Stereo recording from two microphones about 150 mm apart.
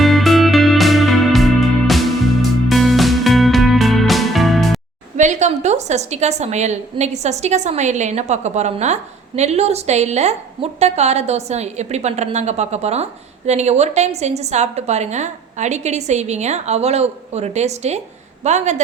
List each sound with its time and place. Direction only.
0.0 s music: centre (ahead or behind)
2.6 s music: centre (ahead or behind)
5.1 s a woman's voice: 50° right (ahead or behind)